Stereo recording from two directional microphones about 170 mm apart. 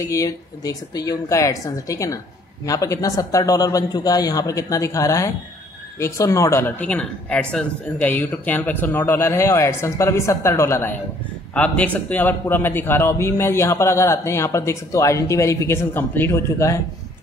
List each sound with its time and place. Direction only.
0.0 s a man's voice: 20° left (ahead or behind)